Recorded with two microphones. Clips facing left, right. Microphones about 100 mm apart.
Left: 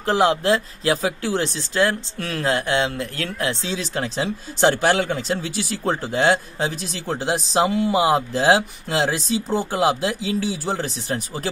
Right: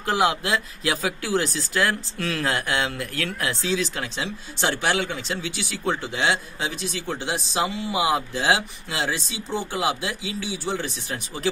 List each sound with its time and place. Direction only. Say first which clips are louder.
0.0 s speech: left 4 dB; 35° left (ahead or behind)
4.0 s speech: left 6 dB; 45° left (ahead or behind)